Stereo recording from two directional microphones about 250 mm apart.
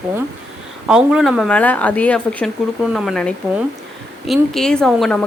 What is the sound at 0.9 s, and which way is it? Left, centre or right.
A woman's voice, centre.